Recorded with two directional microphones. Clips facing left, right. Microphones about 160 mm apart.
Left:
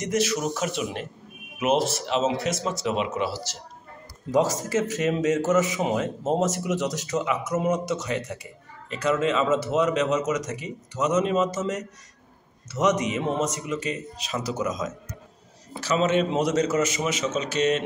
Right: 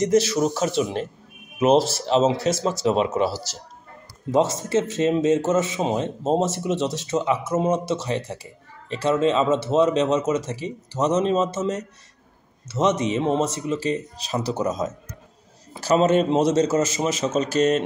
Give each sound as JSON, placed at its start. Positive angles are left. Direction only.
{"t": 0.0, "sound": "a man's voice", "side_deg": -30}
{"t": 4.3, "sound": "a man's voice", "side_deg": -25}